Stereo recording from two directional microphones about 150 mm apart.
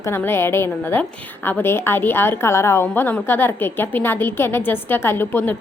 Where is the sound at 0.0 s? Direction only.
15° left (ahead or behind).